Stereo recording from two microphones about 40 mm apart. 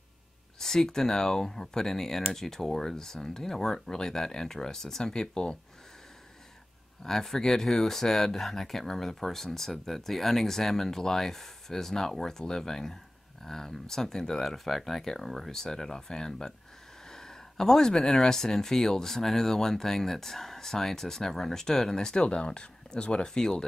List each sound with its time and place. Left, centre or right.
0.6 s speech: centre
7.1 s speech: centre